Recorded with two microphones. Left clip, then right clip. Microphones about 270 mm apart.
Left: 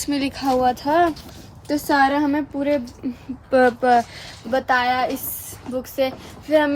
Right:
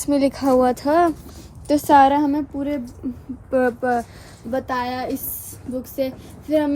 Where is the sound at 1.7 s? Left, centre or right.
Centre.